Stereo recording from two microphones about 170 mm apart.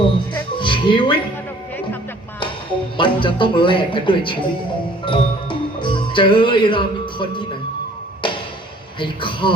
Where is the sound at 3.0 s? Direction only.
30° left (ahead or behind).